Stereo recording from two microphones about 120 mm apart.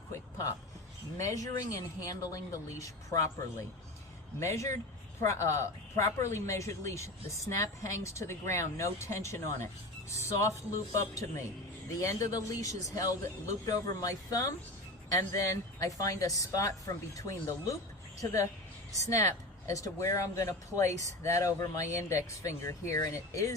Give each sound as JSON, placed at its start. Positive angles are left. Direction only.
{"t": 0.1, "sound": "a sound", "side_deg": 25}
{"t": 1.2, "sound": "speech", "side_deg": 30}
{"t": 16.0, "sound": "a woman's voice", "side_deg": 30}